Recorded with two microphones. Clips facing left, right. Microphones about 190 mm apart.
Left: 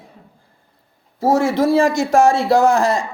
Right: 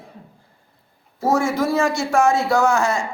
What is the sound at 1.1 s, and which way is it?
A man's voice, 30° left (ahead or behind).